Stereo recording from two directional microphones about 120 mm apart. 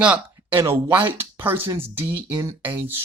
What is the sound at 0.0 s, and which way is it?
Speech, 10° right (ahead or behind).